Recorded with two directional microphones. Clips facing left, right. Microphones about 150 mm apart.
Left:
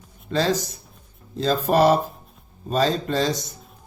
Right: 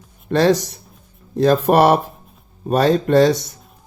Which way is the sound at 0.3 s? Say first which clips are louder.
Right 7 dB; 65° right (ahead or behind).